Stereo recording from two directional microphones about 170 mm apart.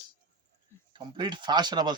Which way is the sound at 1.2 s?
25° right (ahead or behind).